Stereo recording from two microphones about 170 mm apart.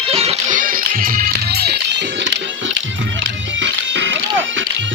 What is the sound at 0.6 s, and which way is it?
Music, 55° right (ahead or behind).